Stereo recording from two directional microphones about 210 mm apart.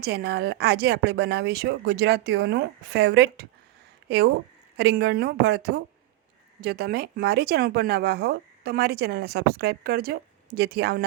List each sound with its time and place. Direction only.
0.0 s speech: 50° right (ahead or behind)